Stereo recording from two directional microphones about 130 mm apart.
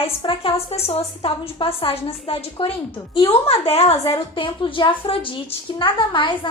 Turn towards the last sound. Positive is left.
turn(degrees=40)  # may be behind; listen again after turning